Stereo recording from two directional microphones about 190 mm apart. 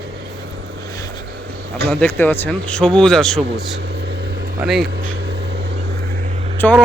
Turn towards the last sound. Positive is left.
turn(degrees=10)  # may be behind; listen again after turning